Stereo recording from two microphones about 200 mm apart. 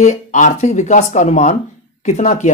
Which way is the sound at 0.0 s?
35° left (ahead or behind).